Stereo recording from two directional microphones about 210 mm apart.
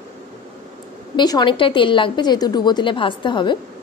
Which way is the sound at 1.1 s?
20° left (ahead or behind).